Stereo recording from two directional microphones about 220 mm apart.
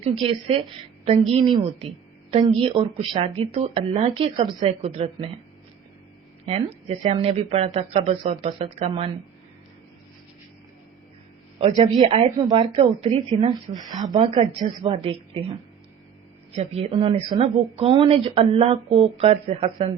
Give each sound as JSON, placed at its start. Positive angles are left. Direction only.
{"t": 0.0, "sound": "speech", "side_deg": -25}
{"t": 6.4, "sound": "speech", "side_deg": -30}
{"t": 11.8, "sound": "speech", "side_deg": -20}
{"t": 16.6, "sound": "speech", "side_deg": -30}